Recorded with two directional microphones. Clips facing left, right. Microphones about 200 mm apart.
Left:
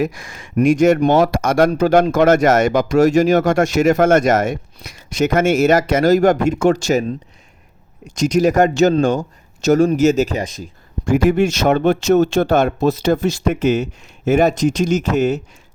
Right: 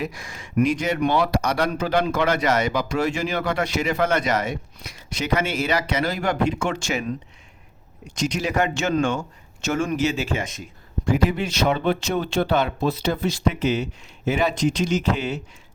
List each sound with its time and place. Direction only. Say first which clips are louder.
0.0 s speech: left 9 dB; 50° left (ahead or behind)
8.0 s a man's voice: left 10 dB; 40° left (ahead or behind)
11.1 s speech: left 8 dB; 50° left (ahead or behind)